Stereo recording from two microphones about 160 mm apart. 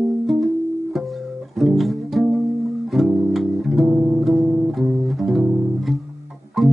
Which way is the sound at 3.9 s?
20° right (ahead or behind).